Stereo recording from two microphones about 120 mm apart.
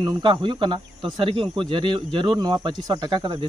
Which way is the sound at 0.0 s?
40° right (ahead or behind).